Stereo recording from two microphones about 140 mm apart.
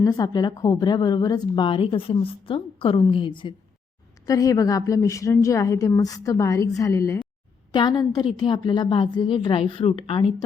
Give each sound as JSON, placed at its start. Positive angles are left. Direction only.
{"t": 0.0, "sound": "a woman's voice", "side_deg": 30}
{"t": 4.3, "sound": "a woman's voice", "side_deg": 25}